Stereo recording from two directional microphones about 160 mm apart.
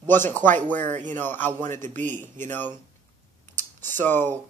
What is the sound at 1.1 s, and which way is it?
Speech, 10° left (ahead or behind).